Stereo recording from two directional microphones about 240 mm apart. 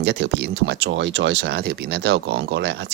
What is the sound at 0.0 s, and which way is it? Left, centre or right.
Speech, right.